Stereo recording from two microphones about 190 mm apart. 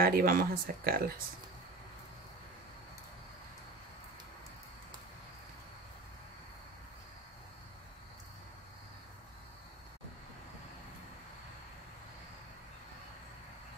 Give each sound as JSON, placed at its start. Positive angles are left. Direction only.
{"t": 0.0, "sound": "speech", "side_deg": -50}